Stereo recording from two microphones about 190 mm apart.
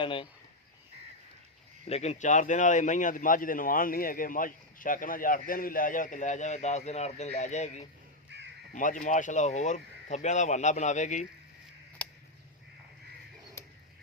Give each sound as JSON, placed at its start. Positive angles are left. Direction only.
{"t": 0.0, "sound": "speech", "side_deg": 25}
{"t": 1.9, "sound": "speech", "side_deg": 35}
{"t": 8.3, "sound": "crow", "side_deg": -65}
{"t": 8.7, "sound": "speech", "side_deg": 45}
{"t": 12.0, "sound": "crow", "side_deg": 5}
{"t": 13.6, "sound": "a sound", "side_deg": 15}